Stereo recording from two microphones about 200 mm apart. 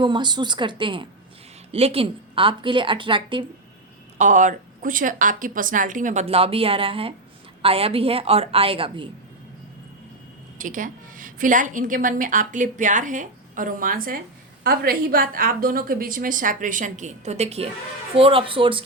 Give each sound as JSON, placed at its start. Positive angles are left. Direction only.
{"t": 0.0, "sound": "a woman's voice", "side_deg": -20}
{"t": 4.2, "sound": "a woman's voice", "side_deg": -40}
{"t": 10.6, "sound": "a woman's voice", "side_deg": -40}